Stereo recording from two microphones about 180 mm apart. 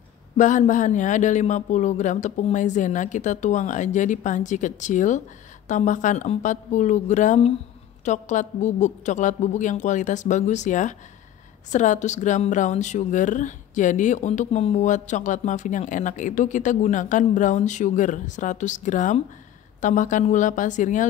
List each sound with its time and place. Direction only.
0.4 s speech: 45° left (ahead or behind)